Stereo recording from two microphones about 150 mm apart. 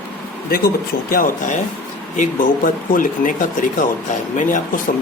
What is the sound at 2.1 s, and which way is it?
Speech, 55° left (ahead or behind).